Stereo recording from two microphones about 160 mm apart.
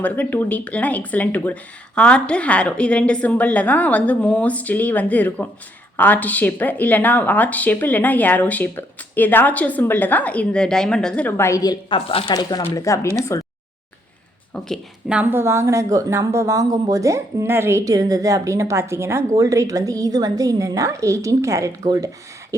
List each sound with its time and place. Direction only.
0.0 s speech: 10° left (ahead or behind)
11.9 s speech: 35° left (ahead or behind)
12.3 s speech: 25° left (ahead or behind)
13.3 s a sound: 20° left (ahead or behind)
14.5 s speech: 5° left (ahead or behind)
15.1 s speech: 15° right (ahead or behind)